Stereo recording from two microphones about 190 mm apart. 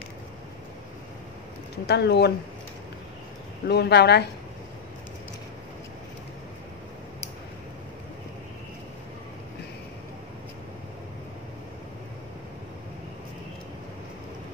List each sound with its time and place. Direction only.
1.9 s speech: 60° left (ahead or behind)
3.6 s speech: 60° left (ahead or behind)